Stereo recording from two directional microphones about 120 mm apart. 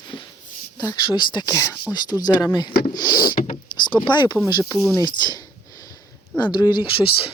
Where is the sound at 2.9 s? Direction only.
35° left (ahead or behind).